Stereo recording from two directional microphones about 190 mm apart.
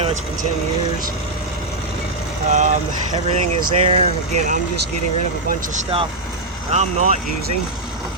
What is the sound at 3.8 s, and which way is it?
Speech, 40° right (ahead or behind).